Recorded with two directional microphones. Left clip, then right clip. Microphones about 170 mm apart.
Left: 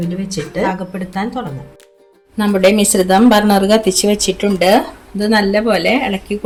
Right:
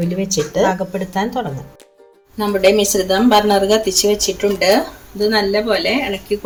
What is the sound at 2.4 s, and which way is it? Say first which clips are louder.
Speech: left 1 dB; 60° left (ahead or behind).